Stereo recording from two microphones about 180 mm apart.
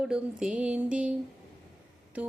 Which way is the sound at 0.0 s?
5° right (ahead or behind).